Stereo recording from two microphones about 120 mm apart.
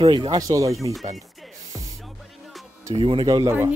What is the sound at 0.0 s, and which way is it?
Speech, 45° right (ahead or behind).